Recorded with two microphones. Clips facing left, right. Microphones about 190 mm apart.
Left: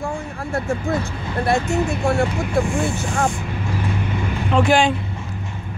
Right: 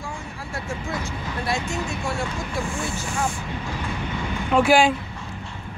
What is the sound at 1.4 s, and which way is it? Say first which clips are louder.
Speech: left 8 dB; 60° left (ahead or behind).